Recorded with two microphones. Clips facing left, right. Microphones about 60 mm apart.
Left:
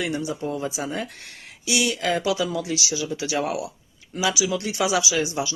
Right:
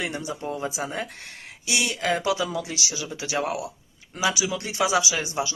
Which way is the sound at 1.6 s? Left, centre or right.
Right.